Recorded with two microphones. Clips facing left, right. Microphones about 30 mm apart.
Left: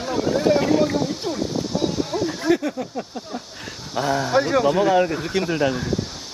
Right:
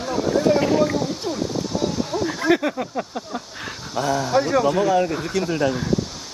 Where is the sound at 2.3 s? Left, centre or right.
Right.